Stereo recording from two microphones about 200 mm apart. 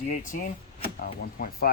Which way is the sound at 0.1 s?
40° left (ahead or behind).